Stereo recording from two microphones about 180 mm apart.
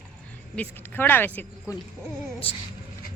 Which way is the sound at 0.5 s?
10° left (ahead or behind).